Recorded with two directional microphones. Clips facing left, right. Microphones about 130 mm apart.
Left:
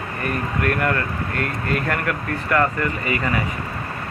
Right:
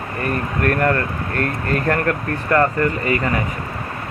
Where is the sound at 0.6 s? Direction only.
40° right (ahead or behind).